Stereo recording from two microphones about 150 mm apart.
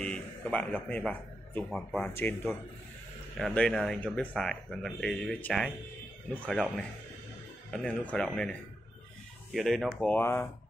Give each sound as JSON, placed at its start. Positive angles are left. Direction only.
{"t": 0.0, "sound": "speech", "side_deg": 5}
{"t": 7.7, "sound": "speech", "side_deg": 5}